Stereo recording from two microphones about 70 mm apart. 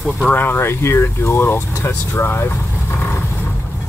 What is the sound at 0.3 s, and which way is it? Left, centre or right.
Speech, left.